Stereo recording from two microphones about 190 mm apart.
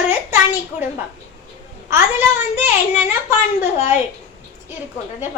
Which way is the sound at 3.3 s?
35° left (ahead or behind).